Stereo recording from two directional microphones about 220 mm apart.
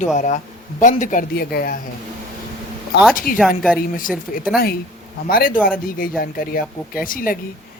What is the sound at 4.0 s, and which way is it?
Speech, 40° left (ahead or behind).